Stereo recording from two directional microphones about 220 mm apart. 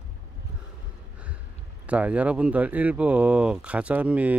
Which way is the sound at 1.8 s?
5° right (ahead or behind).